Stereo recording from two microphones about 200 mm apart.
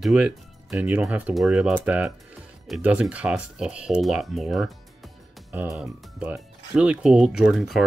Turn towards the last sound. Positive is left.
turn(degrees=0)  # may be behind; listen again after turning